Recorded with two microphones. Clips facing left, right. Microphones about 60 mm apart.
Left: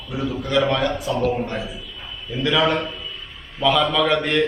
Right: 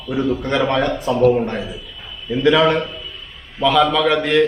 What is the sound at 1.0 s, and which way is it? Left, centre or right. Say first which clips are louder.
A man's voice: right 7 dB; centre.